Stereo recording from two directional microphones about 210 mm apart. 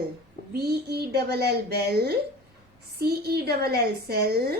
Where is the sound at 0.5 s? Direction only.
50° right (ahead or behind).